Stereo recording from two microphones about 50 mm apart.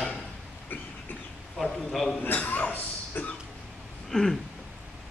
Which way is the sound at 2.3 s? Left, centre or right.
Left.